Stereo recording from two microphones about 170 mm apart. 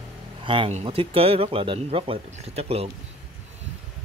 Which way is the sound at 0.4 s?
30° right (ahead or behind).